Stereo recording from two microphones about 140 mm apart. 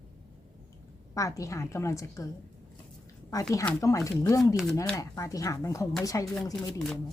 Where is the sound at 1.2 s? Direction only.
25° left (ahead or behind).